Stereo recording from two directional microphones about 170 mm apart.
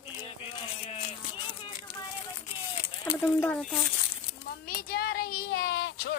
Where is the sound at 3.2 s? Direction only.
10° left (ahead or behind).